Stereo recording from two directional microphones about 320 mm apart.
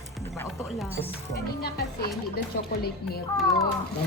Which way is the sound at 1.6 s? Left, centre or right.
Left.